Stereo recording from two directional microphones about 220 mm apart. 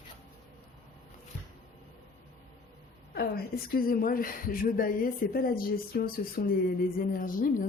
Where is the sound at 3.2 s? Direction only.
45° left (ahead or behind).